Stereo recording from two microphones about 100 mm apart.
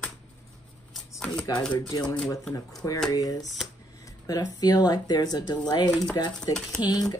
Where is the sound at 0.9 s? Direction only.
10° left (ahead or behind).